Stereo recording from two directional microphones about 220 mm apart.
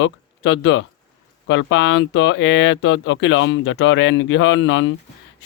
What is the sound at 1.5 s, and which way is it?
Mantra, 60° left (ahead or behind).